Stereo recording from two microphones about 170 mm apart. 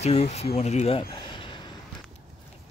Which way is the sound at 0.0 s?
40° left (ahead or behind).